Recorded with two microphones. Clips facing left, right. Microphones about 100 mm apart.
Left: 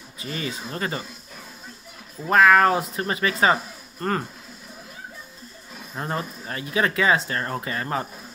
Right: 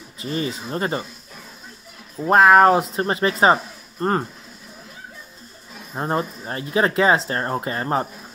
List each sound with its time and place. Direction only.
0.2 s speech: 30° right (ahead or behind)
2.1 s speech: 30° right (ahead or behind)
5.9 s speech: 30° right (ahead or behind)